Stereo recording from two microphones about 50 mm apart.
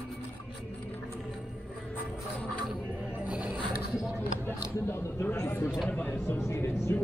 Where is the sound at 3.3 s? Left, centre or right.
Right.